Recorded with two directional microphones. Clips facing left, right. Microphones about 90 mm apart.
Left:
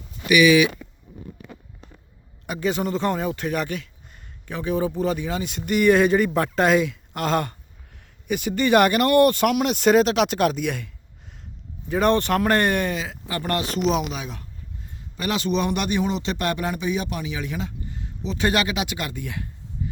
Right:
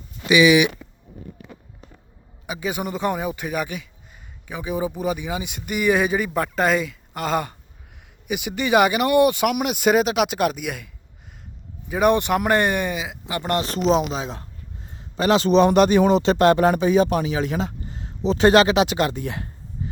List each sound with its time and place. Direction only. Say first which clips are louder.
0.3 s speech: right 1 dB; 25° right (ahead or behind)
2.5 s a man's voice: left 3 dB; 5° right (ahead or behind); by 19.5 s 30° right (ahead or behind)